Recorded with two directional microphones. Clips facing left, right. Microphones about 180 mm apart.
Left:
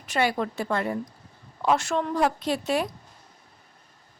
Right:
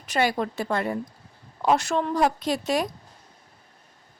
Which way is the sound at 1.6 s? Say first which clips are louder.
Right 1 dB; 35° right (ahead or behind).